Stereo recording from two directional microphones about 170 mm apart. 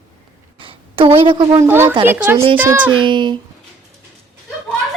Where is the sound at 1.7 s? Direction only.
15° right (ahead or behind).